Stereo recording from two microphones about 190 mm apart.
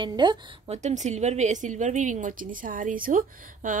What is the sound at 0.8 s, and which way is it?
A woman's voice, 40° right (ahead or behind).